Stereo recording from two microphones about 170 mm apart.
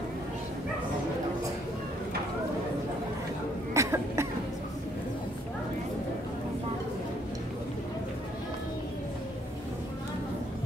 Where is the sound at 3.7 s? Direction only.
15° right (ahead or behind).